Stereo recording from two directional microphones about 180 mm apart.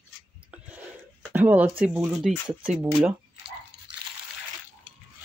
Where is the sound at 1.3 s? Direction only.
10° right (ahead or behind).